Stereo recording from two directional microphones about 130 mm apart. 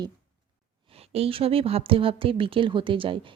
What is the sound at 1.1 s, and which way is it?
Speech, 50° right (ahead or behind).